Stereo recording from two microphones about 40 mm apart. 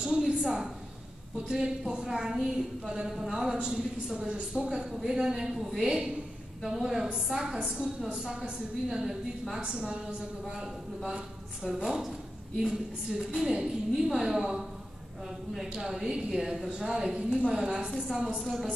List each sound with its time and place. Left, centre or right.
0.0 s a sound: right
1.5 s a woman's voice: right
10.5 s a woman's voice: centre
18.4 s a woman's voice: centre